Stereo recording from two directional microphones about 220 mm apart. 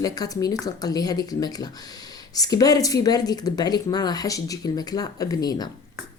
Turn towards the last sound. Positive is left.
turn(degrees=15)  # may be behind; listen again after turning